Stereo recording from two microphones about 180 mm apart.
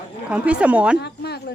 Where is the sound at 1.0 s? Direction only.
65° left (ahead or behind).